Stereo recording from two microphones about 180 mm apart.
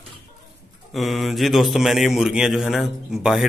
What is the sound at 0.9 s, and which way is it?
Speech, centre (ahead or behind).